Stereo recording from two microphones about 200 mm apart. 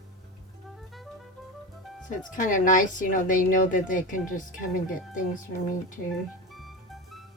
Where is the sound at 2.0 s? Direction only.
40° left (ahead or behind).